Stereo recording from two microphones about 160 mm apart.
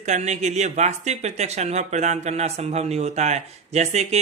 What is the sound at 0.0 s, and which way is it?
Speech, 45° right (ahead or behind).